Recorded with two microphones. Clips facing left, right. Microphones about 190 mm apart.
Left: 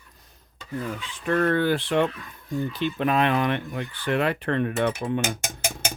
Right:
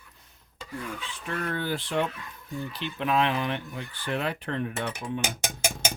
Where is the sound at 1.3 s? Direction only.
60° left (ahead or behind).